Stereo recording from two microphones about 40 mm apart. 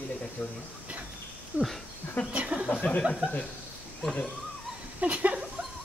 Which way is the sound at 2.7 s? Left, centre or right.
Left.